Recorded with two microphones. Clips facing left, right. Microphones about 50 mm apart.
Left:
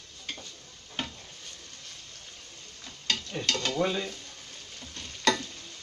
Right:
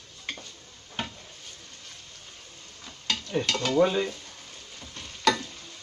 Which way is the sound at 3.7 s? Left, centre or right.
Right.